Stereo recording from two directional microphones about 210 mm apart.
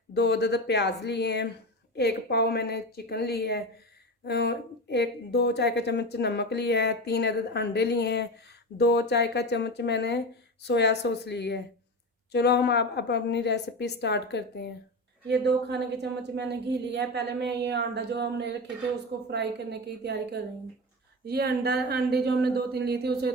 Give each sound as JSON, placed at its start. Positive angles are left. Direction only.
{"t": 0.1, "sound": "a woman's voice", "side_deg": 50}
{"t": 15.3, "sound": "a woman's voice", "side_deg": -50}
{"t": 21.2, "sound": "a woman's voice", "side_deg": -50}